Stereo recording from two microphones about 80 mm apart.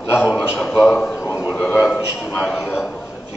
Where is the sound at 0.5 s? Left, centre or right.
Centre.